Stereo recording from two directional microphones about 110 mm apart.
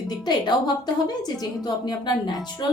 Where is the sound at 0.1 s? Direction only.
40° left (ahead or behind).